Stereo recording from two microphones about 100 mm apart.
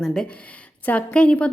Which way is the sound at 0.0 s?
5° left (ahead or behind).